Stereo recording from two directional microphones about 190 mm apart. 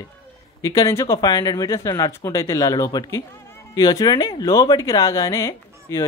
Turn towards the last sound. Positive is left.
turn(degrees=15)  # may be behind; listen again after turning